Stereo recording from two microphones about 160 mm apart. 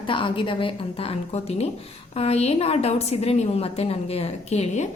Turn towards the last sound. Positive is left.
turn(degrees=40)  # may be behind; listen again after turning